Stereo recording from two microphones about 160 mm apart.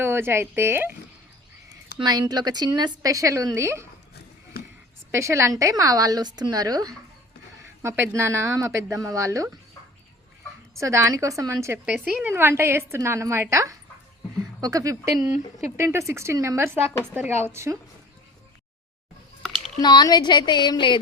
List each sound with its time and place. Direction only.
0.0 s speech: 15° right (ahead or behind)
2.0 s speech: 30° right (ahead or behind)
5.1 s speech: 20° right (ahead or behind)
10.8 s speech: 20° right (ahead or behind)
11.9 s speech: 5° right (ahead or behind)
19.8 s speech: 25° left (ahead or behind)